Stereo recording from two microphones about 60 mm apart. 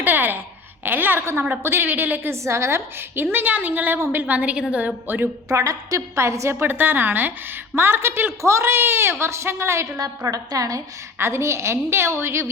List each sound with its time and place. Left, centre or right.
0.0 s a woman's voice: right
2.3 s a woman's voice: right
3.3 s a woman's voice: right
5.0 s a woman's voice: right
5.5 s a woman's voice: right
10.2 s a woman's voice: right
11.2 s a woman's voice: right